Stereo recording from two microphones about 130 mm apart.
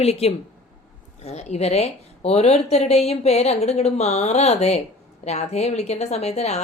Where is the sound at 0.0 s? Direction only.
55° left (ahead or behind).